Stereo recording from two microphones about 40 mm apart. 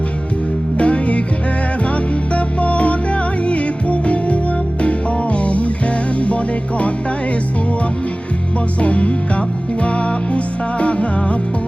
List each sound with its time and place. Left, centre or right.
0.8 s music: left
8.8 s music: left